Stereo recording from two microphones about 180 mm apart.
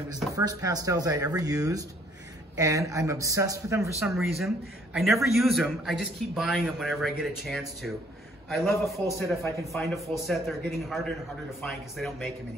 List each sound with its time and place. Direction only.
0.4 s a man's voice: 20° right (ahead or behind)
4.0 s a man's voice: centre (ahead or behind)